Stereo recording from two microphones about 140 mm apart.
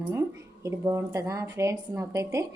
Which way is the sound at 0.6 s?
20° right (ahead or behind).